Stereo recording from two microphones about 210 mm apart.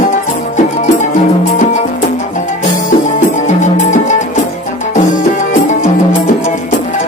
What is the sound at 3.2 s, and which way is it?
Music, 35° left (ahead or behind).